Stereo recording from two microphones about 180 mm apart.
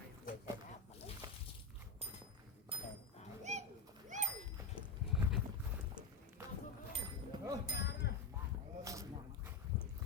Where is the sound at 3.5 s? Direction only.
40° right (ahead or behind).